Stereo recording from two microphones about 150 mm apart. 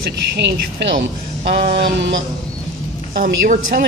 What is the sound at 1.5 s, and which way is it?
Speech, 90° right.